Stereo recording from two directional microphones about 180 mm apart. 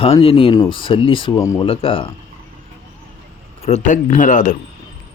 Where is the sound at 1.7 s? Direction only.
30° left (ahead or behind).